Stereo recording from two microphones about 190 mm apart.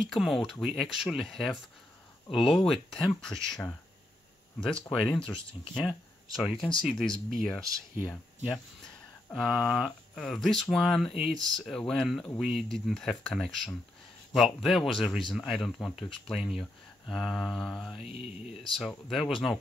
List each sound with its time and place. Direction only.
0.0 s speech: centre (ahead or behind)
5.5 s speech: 25° left (ahead or behind)
6.3 s speech: centre (ahead or behind)
9.3 s speech: centre (ahead or behind)